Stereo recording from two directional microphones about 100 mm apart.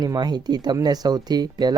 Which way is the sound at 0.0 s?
45° right (ahead or behind).